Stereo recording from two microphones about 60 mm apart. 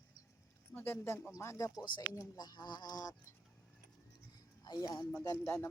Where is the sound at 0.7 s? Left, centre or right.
Left.